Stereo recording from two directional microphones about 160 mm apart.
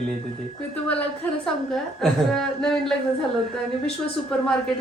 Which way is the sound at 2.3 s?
5° left (ahead or behind).